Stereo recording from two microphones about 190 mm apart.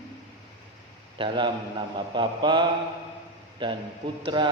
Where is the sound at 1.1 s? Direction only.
25° right (ahead or behind).